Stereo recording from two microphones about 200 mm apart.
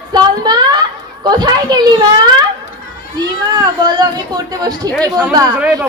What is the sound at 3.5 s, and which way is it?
A child's voice, 20° right (ahead or behind).